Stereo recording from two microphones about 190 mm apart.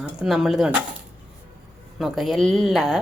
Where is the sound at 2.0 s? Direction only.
Centre (ahead or behind).